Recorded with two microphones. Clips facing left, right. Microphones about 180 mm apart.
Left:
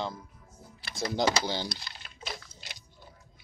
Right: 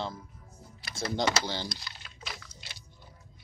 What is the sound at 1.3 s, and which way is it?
Speech, 10° left (ahead or behind).